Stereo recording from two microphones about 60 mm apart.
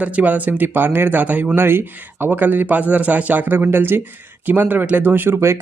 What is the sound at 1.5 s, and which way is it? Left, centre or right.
Speech, right.